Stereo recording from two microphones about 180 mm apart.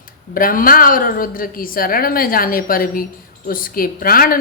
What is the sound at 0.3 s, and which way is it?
Speech, 50° left (ahead or behind).